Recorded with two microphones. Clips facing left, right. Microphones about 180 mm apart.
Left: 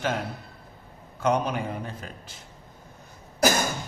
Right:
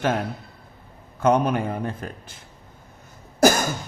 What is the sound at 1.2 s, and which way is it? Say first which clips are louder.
A man's voice: right 5 dB; 55° right (ahead or behind).